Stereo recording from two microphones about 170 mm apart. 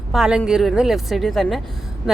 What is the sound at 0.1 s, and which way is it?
A woman's voice, 5° right (ahead or behind).